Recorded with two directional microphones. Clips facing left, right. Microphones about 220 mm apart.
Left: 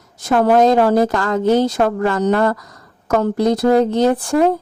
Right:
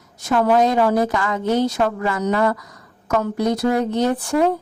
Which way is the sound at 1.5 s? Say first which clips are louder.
Left 4 dB; 90° left.